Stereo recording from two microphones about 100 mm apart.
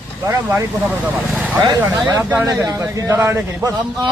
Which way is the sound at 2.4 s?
30° right (ahead or behind).